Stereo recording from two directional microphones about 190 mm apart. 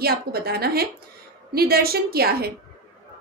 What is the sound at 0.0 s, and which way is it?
A woman's voice, 55° right (ahead or behind).